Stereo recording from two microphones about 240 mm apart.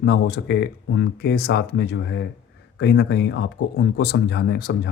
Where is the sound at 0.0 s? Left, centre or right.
Left.